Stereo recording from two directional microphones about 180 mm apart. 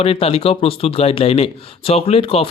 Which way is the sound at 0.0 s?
35° left (ahead or behind).